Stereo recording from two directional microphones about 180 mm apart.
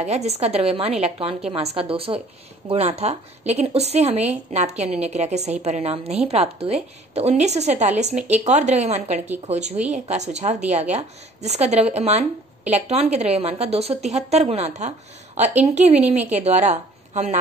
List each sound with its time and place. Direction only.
0.0 s a woman's voice: 35° right (ahead or behind)